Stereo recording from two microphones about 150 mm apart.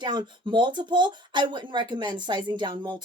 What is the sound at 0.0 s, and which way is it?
Speech, 30° right (ahead or behind).